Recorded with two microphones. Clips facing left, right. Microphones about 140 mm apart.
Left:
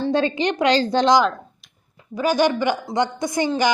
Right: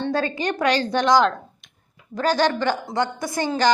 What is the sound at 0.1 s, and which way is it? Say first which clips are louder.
A woman's voice: left 3 dB; 20° left (ahead or behind).